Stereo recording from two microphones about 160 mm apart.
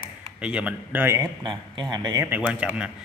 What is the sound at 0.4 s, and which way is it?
Speech, 5° right (ahead or behind).